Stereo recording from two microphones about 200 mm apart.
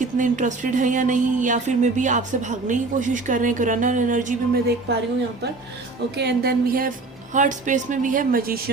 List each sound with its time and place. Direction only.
0.0 s speech: 40° right (ahead or behind)
6.1 s a sound: 55° right (ahead or behind)
7.3 s speech: 40° right (ahead or behind)